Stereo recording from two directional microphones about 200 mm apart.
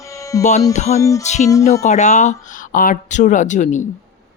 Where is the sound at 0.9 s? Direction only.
15° left (ahead or behind).